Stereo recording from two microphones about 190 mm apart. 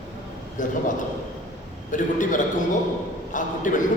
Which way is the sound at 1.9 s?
40° left (ahead or behind).